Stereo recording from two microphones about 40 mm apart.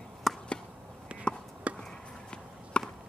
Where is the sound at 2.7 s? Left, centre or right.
Left.